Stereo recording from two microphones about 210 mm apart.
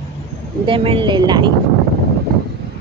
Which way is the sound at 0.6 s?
25° right (ahead or behind).